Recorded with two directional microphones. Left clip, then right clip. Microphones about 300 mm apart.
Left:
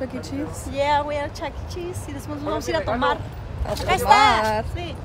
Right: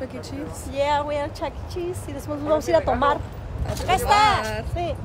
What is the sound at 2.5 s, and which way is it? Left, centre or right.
Speech, right.